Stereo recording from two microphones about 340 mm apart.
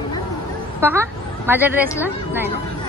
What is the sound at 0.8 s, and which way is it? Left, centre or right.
Speech, centre.